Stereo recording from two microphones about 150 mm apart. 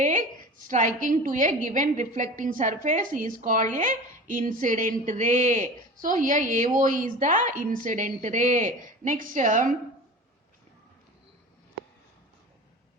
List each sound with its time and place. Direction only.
0.0 s a woman's voice: 60° right (ahead or behind)